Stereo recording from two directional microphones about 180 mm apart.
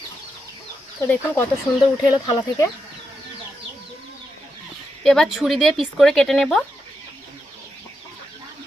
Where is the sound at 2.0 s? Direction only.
25° left (ahead or behind).